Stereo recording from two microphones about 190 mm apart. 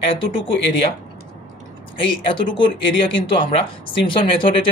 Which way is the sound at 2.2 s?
25° left (ahead or behind).